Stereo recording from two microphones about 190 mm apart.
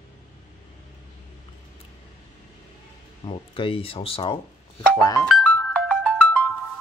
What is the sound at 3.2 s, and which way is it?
Speech, 25° left (ahead or behind).